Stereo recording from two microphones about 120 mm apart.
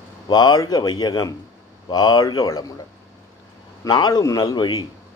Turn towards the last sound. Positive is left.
turn(degrees=35)  # may be behind; listen again after turning